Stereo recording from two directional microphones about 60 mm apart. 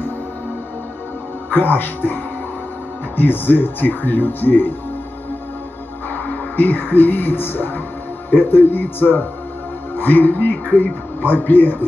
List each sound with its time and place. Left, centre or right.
1.5 s speech: left
3.2 s speech: left
6.0 s speech: left